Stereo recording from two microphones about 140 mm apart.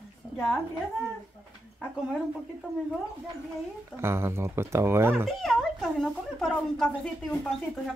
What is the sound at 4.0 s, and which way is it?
Speech, 20° right (ahead or behind).